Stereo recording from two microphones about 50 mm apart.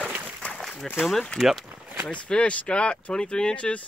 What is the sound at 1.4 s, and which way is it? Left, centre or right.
Speech, centre.